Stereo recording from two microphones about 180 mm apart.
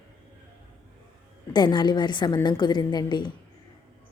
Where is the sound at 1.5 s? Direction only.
25° left (ahead or behind).